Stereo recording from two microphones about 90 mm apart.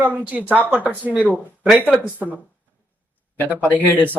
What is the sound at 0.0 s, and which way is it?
Speech, 15° right (ahead or behind).